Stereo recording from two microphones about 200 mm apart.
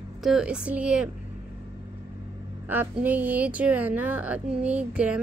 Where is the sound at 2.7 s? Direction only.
10° right (ahead or behind).